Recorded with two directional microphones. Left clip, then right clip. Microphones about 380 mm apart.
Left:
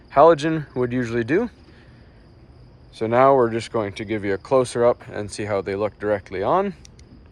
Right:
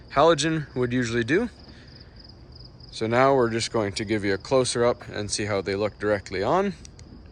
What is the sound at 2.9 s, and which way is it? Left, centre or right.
Speech, centre.